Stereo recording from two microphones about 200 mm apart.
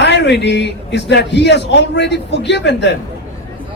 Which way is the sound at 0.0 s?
60° left (ahead or behind).